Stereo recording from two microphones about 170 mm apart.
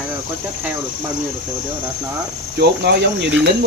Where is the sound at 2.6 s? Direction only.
80° right.